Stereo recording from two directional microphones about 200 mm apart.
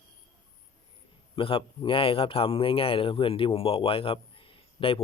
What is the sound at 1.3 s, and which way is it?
A man's voice, 25° left (ahead or behind).